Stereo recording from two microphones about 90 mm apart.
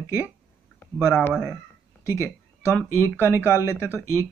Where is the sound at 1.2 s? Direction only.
25° left (ahead or behind).